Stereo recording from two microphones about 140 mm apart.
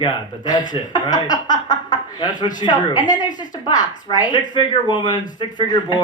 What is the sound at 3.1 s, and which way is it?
A woman's voice, 30° left (ahead or behind).